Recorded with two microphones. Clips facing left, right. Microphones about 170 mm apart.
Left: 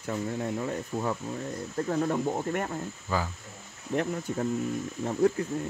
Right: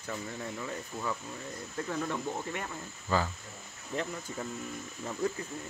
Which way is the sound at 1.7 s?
40° left (ahead or behind).